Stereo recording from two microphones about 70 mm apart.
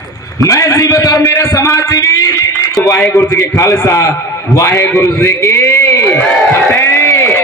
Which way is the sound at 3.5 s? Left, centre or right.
Left.